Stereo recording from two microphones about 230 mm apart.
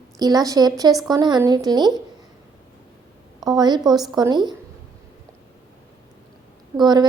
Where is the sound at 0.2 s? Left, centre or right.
Centre.